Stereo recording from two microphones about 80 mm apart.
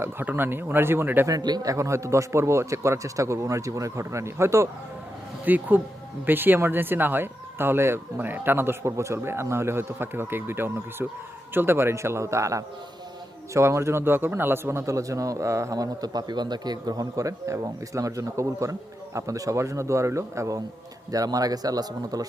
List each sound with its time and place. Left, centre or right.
0.0 s speech: right
1.3 s a man's voice: right
1.7 s a man's voice: right
5.5 s a man's voice: right
21.1 s speech: right